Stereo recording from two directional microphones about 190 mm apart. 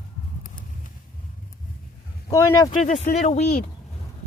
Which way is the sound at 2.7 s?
40° left (ahead or behind).